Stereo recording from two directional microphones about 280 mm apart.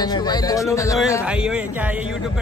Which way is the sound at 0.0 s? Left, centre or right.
Centre.